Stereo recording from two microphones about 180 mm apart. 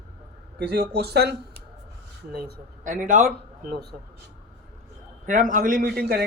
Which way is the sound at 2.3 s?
50° right (ahead or behind).